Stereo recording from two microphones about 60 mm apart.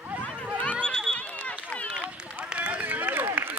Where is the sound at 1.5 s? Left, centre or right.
Left.